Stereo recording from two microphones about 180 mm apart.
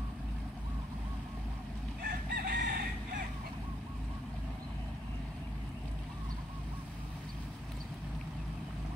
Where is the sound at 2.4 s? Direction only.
55° right (ahead or behind).